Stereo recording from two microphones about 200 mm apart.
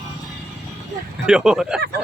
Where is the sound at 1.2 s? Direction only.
5° right (ahead or behind).